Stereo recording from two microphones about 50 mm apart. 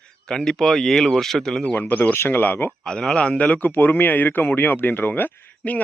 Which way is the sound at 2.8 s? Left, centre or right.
Centre.